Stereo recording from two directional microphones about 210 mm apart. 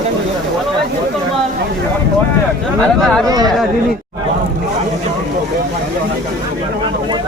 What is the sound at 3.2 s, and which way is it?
Speech, 20° right (ahead or behind).